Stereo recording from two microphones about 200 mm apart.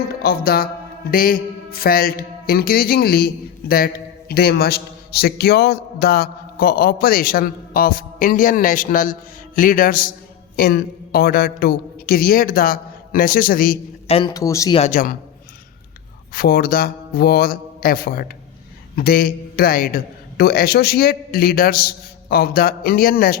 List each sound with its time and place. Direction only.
0.2 s a man's voice: 50° left (ahead or behind)
14.1 s speech: 25° left (ahead or behind)
14.4 s speech: 15° left (ahead or behind)
14.8 s a man's voice: 40° left (ahead or behind)
16.3 s a man's voice: 50° left (ahead or behind)